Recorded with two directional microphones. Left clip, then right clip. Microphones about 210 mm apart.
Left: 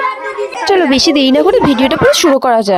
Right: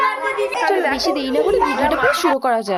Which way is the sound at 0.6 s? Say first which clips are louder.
Left 9 dB; 40° left (ahead or behind).